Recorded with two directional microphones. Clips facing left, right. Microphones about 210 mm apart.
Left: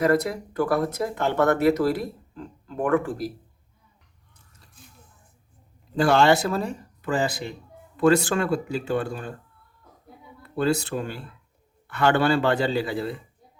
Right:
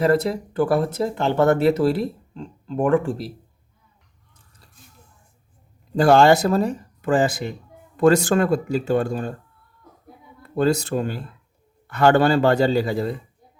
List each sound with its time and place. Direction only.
0.0 s speech: 30° right (ahead or behind)
6.0 s speech: 40° right (ahead or behind)
10.4 s a man's voice: 40° right (ahead or behind)